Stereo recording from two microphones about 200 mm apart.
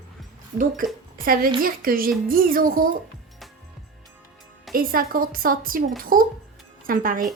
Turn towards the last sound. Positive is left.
turn(degrees=-45)  # may be behind; listen again after turning